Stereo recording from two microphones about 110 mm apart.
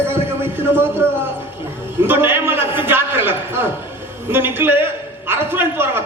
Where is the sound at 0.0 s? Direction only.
20° right (ahead or behind).